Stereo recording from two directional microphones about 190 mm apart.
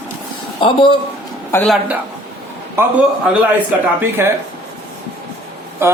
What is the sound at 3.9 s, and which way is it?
Speech, 10° right (ahead or behind).